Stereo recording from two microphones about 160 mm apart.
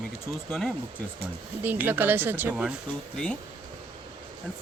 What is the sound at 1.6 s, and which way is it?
Speech, 10° right (ahead or behind).